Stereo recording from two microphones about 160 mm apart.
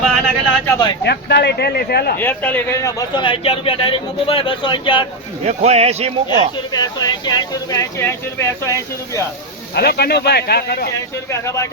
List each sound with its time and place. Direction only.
0.0 s speech: centre (ahead or behind)
1.0 s speech: 90° left
2.1 s a man's voice: 10° left (ahead or behind); by 5.0 s 30° left (ahead or behind)
5.5 s speech: 40° right (ahead or behind)
6.7 s speech: 25° left (ahead or behind)
9.7 s speech: 85° left
11.3 s speech: 15° left (ahead or behind)